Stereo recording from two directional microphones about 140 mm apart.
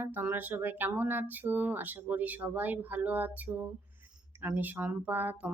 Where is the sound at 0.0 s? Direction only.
15° right (ahead or behind).